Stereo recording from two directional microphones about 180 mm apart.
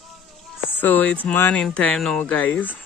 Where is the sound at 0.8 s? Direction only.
10° left (ahead or behind).